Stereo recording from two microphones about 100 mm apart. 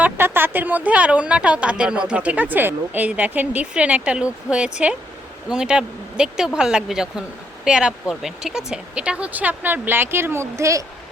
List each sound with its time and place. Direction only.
0.0 s speech: 20° right (ahead or behind)